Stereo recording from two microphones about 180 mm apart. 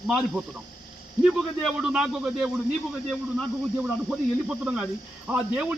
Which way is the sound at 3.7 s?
5° right (ahead or behind).